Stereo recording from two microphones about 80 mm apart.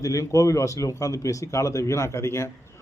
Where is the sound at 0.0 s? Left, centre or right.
Left.